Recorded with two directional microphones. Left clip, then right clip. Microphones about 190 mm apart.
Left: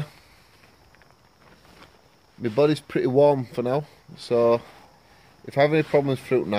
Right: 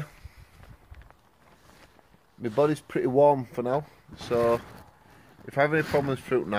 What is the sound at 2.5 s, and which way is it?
Speech, 5° left (ahead or behind).